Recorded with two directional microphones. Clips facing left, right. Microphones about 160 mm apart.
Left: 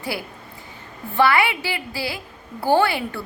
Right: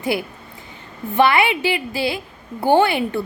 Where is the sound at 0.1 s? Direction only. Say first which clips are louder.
Right 6 dB; 20° right (ahead or behind).